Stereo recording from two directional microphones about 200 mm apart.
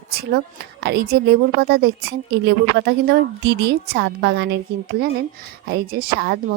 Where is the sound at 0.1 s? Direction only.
50° right (ahead or behind).